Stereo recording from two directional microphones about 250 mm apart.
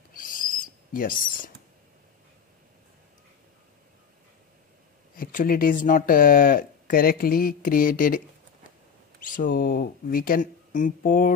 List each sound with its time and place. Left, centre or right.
0.1 s owl: left
5.1 s speech: left
9.2 s speech: left